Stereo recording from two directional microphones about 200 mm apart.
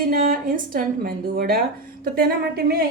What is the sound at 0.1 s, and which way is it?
A woman's voice, 45° right (ahead or behind).